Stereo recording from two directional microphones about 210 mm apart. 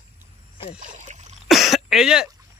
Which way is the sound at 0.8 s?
35° right (ahead or behind).